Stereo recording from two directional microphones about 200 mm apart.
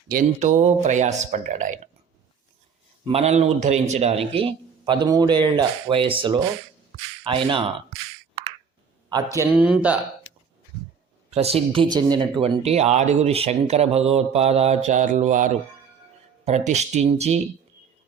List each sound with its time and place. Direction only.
0.1 s speech: 40° right (ahead or behind)
3.1 s speech: 30° right (ahead or behind)
9.0 s speech: 20° right (ahead or behind)
11.3 s speech: 30° right (ahead or behind)
12.4 s speech: 30° right (ahead or behind)